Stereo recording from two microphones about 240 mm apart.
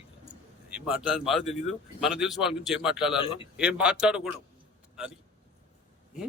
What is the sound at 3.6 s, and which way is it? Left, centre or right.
Speech, centre.